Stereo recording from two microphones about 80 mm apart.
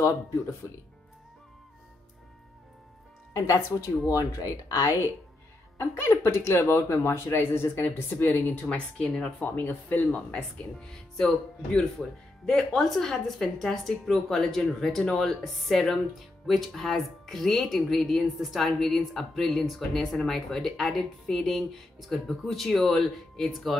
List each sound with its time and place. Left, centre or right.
3.3 s speech: left
5.8 s speech: left
8.6 s speech: centre
9.6 s speech: left; by 23.8 s centre